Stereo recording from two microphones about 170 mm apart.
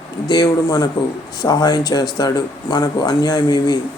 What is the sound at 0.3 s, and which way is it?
A man's voice, 25° left (ahead or behind).